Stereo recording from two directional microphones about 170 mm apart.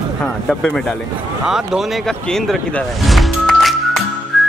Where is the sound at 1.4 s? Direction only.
5° right (ahead or behind).